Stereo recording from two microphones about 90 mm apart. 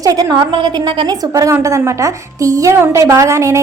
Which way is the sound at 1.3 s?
35° right (ahead or behind).